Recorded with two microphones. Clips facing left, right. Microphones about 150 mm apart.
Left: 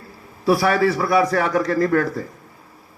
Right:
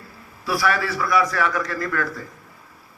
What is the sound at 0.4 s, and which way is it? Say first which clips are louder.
A man's voice: left 6 dB; 30° left (ahead or behind).